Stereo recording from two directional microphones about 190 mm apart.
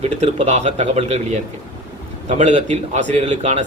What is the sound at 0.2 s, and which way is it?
Speech, 35° right (ahead or behind).